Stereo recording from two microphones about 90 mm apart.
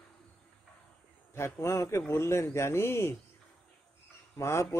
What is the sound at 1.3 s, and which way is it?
A man's voice, 30° left (ahead or behind).